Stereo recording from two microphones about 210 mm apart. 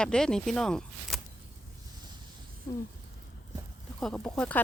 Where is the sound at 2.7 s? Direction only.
15° left (ahead or behind).